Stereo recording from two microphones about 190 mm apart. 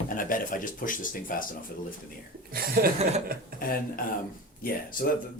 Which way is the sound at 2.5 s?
50° right (ahead or behind).